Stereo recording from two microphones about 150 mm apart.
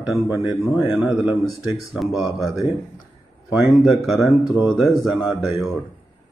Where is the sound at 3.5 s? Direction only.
5° right (ahead or behind).